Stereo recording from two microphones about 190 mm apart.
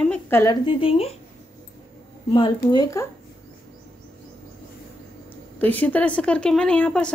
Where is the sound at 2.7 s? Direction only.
15° left (ahead or behind).